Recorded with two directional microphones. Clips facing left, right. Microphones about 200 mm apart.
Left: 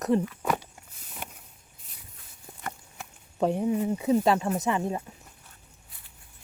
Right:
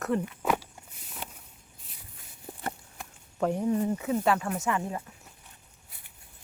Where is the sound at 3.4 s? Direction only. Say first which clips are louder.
Left 1 dB; 15° left (ahead or behind).